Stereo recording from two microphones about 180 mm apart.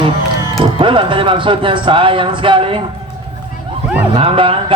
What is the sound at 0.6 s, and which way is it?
Speech, 30° right (ahead or behind).